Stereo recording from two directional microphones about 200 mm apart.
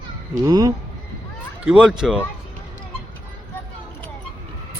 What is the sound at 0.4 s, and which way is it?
Speech, 20° right (ahead or behind).